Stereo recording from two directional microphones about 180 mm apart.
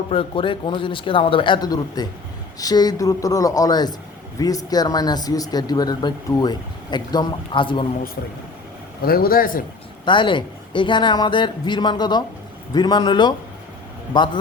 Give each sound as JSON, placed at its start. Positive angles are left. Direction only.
{"t": 0.1, "sound": "speech", "side_deg": 30}
{"t": 9.0, "sound": "a man's voice", "side_deg": 55}
{"t": 10.1, "sound": "speech", "side_deg": 25}